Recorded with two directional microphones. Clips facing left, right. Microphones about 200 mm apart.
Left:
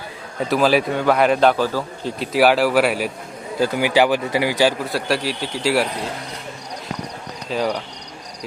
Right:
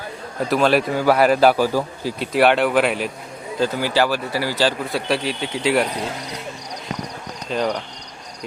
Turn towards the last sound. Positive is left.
turn(degrees=5)  # may be behind; listen again after turning